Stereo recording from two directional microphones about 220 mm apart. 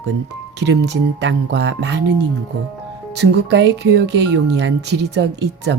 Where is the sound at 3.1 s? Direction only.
50° right (ahead or behind).